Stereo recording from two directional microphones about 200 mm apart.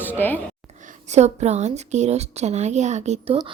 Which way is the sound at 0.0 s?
10° left (ahead or behind).